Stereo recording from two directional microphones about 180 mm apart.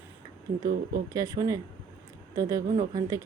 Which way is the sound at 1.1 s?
20° right (ahead or behind).